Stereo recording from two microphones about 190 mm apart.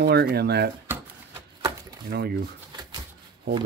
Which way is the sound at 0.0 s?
55° right (ahead or behind).